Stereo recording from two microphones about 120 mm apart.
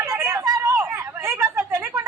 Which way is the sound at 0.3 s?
30° right (ahead or behind).